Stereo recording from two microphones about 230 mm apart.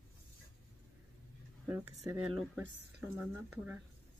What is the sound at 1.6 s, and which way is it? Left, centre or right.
Speech, centre.